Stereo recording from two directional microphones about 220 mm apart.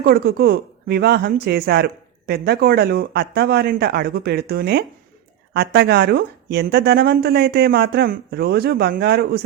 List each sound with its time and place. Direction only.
0.0 s speech: 45° right (ahead or behind)